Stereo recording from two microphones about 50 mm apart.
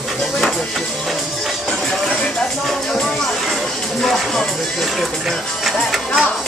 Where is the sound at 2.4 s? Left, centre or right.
Centre.